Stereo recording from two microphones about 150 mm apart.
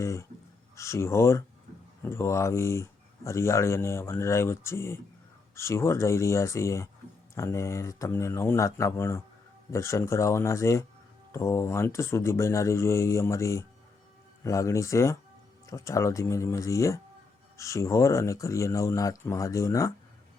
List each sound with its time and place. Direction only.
0.0 s speech: 20° left (ahead or behind)